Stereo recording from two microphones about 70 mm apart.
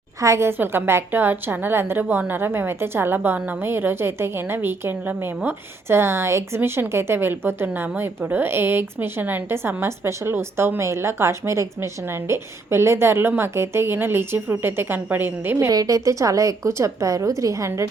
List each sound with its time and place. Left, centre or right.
0.2 s speech: right
15.5 s a woman's voice: right